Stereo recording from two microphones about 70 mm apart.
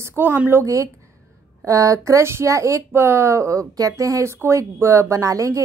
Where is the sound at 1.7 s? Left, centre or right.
Right.